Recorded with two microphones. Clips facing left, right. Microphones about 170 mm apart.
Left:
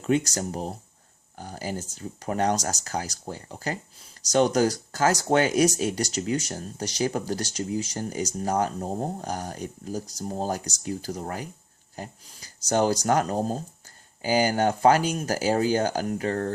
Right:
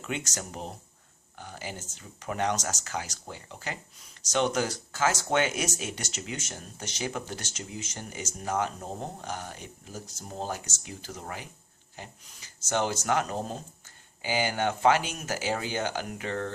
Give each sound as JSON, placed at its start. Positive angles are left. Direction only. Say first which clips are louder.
{"t": 0.0, "sound": "speech", "louder": "left 11 dB", "side_deg": 35}